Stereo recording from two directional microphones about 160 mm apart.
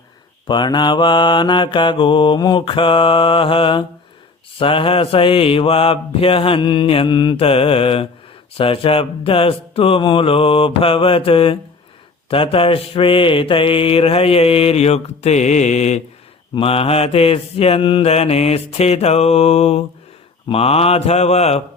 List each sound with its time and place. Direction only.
0.4 s mantra: 30° left (ahead or behind)